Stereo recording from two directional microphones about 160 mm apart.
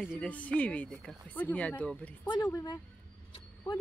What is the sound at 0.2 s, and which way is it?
Speech, 10° left (ahead or behind).